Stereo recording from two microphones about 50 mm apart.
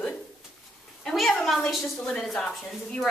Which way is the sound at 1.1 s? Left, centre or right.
Centre.